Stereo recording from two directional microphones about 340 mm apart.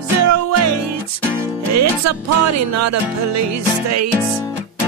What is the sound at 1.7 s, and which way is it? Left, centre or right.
Music, right.